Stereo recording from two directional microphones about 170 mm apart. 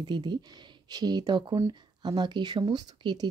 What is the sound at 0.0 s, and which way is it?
A woman's voice, 25° right (ahead or behind).